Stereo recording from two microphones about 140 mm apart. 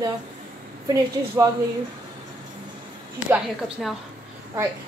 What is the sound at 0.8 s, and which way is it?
Speech, 25° right (ahead or behind).